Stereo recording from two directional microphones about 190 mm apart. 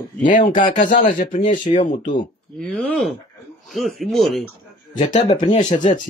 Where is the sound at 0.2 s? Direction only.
45° left (ahead or behind).